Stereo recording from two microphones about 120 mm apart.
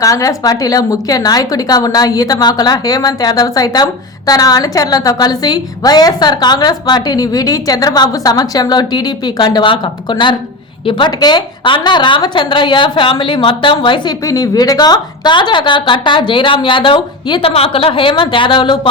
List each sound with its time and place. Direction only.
0.0 s a woman's voice: 30° left (ahead or behind)
14.3 s a woman's voice: 30° left (ahead or behind)
17.5 s a woman's voice: 55° left (ahead or behind)